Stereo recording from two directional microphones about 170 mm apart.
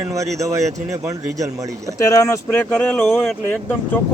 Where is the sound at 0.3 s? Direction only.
20° right (ahead or behind).